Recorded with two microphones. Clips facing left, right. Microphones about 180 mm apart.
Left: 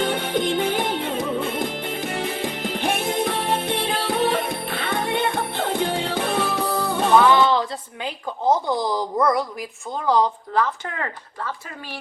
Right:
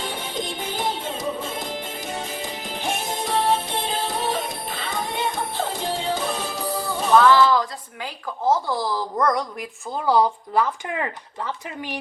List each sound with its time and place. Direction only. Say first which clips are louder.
0.0 s music: left 7 dB; 60° left (ahead or behind)
7.1 s speech: right 1 dB; 15° left (ahead or behind)
10.1 s speech: even; 10° right (ahead or behind)